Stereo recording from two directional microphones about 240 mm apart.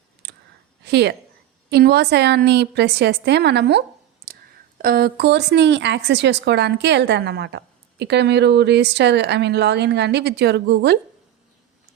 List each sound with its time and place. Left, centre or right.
0.2 s clicking: right
0.9 s a woman's voice: right